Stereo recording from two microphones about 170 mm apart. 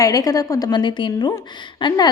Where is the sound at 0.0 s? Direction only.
20° left (ahead or behind).